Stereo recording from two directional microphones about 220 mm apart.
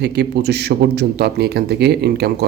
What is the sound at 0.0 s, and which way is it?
A man's voice, 50° right (ahead or behind).